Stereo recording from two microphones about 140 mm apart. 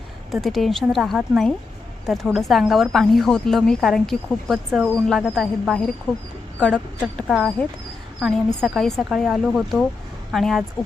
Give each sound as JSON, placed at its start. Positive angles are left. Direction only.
{"t": 0.3, "sound": "a woman's voice", "side_deg": 0}
{"t": 8.6, "sound": "a woman's voice", "side_deg": 0}